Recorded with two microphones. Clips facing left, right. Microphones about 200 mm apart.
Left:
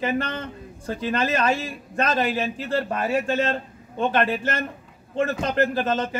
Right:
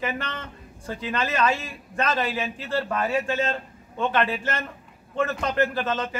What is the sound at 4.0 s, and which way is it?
A man's voice, 35° left (ahead or behind).